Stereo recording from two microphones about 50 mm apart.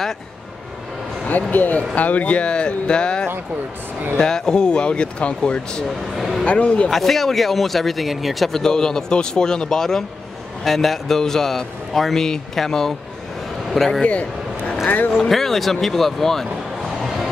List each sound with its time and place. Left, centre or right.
1.5 s a man's voice: left
6.1 s speech: centre
6.4 s speech: left
6.9 s a man's voice: centre
15.2 s speech: centre